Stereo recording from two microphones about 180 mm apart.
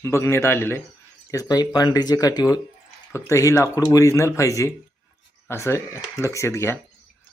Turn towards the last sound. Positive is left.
turn(degrees=15)  # may be behind; listen again after turning